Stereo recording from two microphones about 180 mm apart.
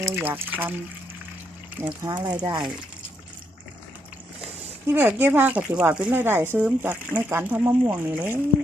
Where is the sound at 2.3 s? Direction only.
25° right (ahead or behind).